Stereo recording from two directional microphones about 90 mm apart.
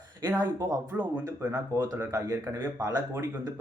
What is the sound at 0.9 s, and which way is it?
Speech, 20° right (ahead or behind).